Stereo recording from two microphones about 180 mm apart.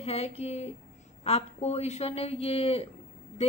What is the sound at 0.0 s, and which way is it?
A woman's voice, 35° left (ahead or behind).